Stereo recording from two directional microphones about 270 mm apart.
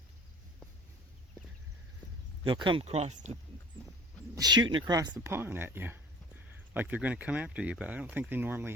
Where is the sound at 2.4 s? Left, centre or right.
Centre.